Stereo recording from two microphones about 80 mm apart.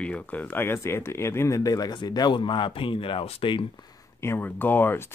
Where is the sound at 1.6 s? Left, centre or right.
Left.